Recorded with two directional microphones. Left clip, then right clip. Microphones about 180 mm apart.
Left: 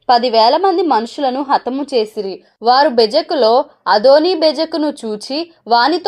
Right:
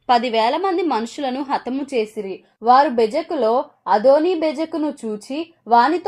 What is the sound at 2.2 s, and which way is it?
Speech, 15° left (ahead or behind).